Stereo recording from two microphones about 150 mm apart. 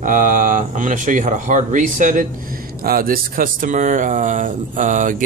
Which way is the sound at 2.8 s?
75° right (ahead or behind).